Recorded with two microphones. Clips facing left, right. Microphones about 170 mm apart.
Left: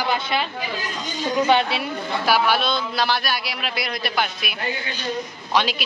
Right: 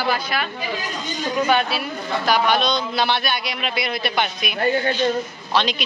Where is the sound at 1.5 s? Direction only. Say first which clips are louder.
Left 1 dB; 25° left (ahead or behind).